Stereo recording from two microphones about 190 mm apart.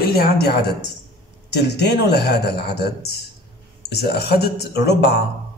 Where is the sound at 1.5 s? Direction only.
60° left (ahead or behind).